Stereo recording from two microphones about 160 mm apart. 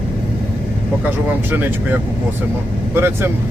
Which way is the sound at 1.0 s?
10° right (ahead or behind).